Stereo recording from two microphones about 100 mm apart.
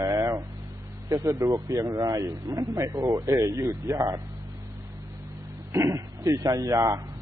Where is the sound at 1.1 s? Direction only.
30° right (ahead or behind).